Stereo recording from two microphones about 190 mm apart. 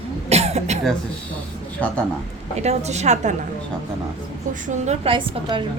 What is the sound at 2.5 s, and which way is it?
Speech, 35° right (ahead or behind).